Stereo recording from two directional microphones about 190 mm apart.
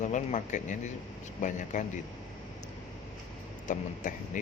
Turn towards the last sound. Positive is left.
turn(degrees=40)  # may be behind; listen again after turning